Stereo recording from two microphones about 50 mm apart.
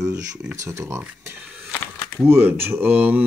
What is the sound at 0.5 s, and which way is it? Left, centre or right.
Speech, right.